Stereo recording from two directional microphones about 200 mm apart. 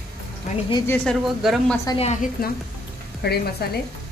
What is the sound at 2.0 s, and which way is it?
Speech, 40° left (ahead or behind).